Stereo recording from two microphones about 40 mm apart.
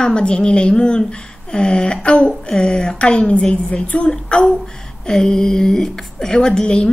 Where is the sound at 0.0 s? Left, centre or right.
Left.